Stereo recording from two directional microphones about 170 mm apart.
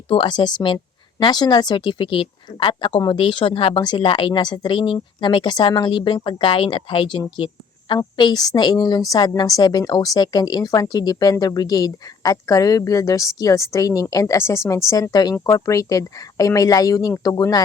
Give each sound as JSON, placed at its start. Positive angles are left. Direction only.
{"t": 0.1, "sound": "speech", "side_deg": 30}